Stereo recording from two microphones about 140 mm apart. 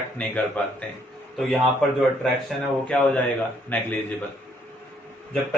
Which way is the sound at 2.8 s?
10° left (ahead or behind).